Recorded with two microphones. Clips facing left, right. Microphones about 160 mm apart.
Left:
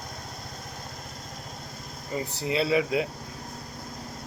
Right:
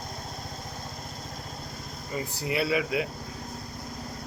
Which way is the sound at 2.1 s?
25° left (ahead or behind).